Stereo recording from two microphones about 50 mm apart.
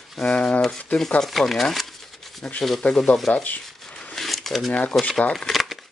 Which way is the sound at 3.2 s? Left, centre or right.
Centre.